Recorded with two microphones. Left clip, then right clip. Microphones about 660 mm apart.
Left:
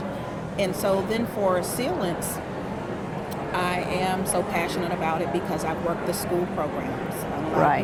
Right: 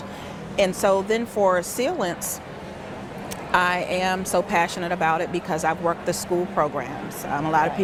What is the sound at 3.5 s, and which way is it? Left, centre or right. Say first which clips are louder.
Speech: right 6 dB; right.